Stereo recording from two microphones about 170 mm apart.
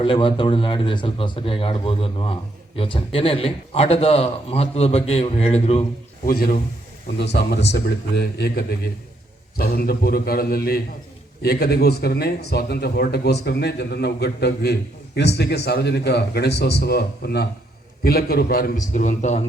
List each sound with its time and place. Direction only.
0.0 s a man's voice: 30° left (ahead or behind)
6.2 s a man's voice: 60° left (ahead or behind)
7.2 s a man's voice: 75° left (ahead or behind)
18.9 s speech: 45° left (ahead or behind)